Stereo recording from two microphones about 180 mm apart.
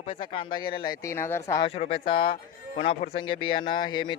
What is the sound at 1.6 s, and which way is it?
Speech, 35° left (ahead or behind).